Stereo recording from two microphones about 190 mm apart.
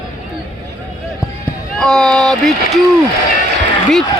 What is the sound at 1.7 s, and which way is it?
A man's voice, centre (ahead or behind).